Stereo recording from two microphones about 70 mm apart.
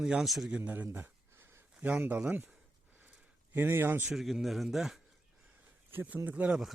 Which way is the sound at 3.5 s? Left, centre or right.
Right.